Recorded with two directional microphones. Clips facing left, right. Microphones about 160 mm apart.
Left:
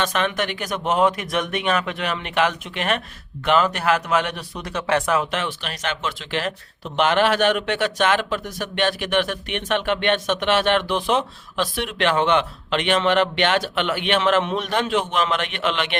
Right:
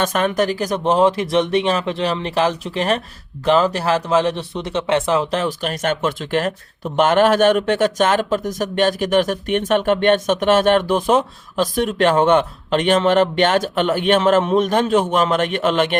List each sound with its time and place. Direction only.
0.0 s speech: 45° right (ahead or behind)